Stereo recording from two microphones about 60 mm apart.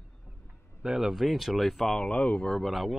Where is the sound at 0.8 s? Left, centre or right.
Centre.